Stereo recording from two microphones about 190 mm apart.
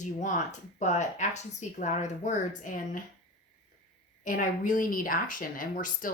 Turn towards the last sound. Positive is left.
turn(degrees=45)  # may be behind; listen again after turning